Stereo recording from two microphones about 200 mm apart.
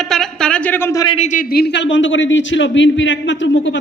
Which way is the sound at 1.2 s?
40° left (ahead or behind).